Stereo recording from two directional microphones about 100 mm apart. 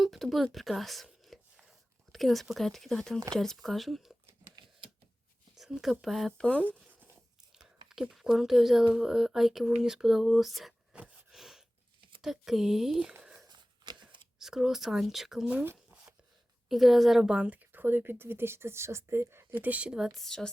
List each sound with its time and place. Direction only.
0.0 s a sound: centre (ahead or behind)
2.1 s speech: centre (ahead or behind)
5.5 s speech: 5° right (ahead or behind)
6.3 s speech: 10° left (ahead or behind)
6.7 s zipper: 15° right (ahead or behind)
7.9 s speech: 5° right (ahead or behind)
10.9 s a sound: 10° right (ahead or behind)
12.2 s speech: 5° right (ahead or behind)
13.2 s a sound: 5° right (ahead or behind)
13.5 s a sound: 50° right (ahead or behind)
14.3 s speech: 5° right (ahead or behind)
15.5 s speech: 20° right (ahead or behind)
16.6 s speech: centre (ahead or behind)
20.1 s speech: 5° left (ahead or behind)